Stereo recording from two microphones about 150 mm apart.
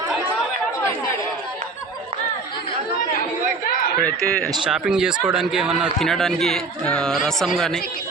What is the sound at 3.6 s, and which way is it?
Chatter, 90° left.